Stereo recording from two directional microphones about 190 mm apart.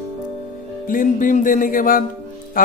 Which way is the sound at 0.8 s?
45° left (ahead or behind).